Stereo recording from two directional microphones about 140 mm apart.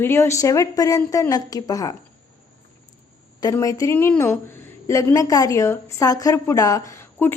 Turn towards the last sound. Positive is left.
turn(degrees=15)  # may be behind; listen again after turning